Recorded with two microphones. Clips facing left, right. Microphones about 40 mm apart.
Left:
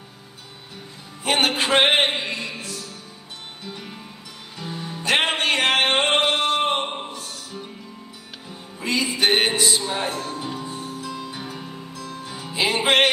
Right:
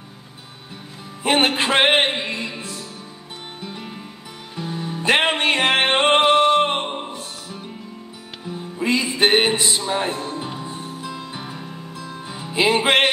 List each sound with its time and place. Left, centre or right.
1.2 s music: right
3.6 s music: centre
5.0 s music: right
6.8 s music: centre
8.7 s music: right
9.4 s a man's voice: right
9.8 s music: right
12.5 s music: right
12.8 s music: right